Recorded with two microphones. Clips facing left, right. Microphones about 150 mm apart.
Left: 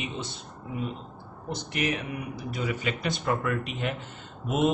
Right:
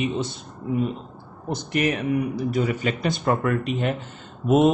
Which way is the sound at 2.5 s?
40° right (ahead or behind).